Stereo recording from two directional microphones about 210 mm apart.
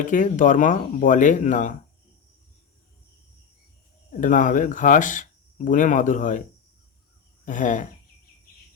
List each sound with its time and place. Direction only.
0.0 s speech: 40° left (ahead or behind)
4.2 s speech: 40° left (ahead or behind)
7.4 s a sound: 35° left (ahead or behind)